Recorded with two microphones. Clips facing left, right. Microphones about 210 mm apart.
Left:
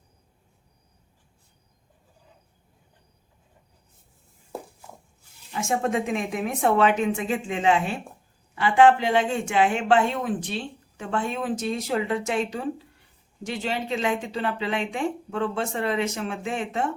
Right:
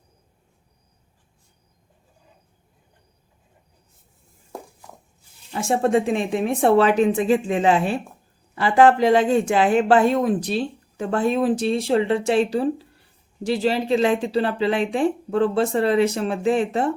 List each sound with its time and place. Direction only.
5.5 s a woman's voice: 35° right (ahead or behind)